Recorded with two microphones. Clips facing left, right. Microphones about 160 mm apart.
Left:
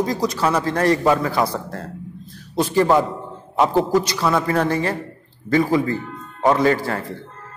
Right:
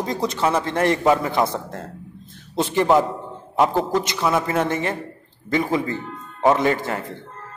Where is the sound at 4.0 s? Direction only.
20° right (ahead or behind).